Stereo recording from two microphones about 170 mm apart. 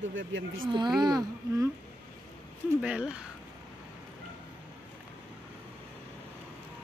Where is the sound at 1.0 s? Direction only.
25° right (ahead or behind).